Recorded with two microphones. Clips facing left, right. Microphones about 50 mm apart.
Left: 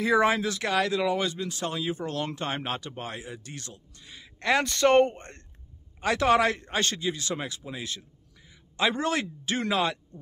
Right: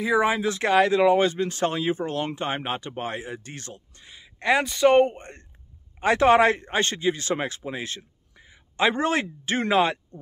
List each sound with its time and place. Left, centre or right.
0.0 s speech: centre
0.4 s a man's voice: right
4.1 s a man's voice: centre
5.9 s a man's voice: right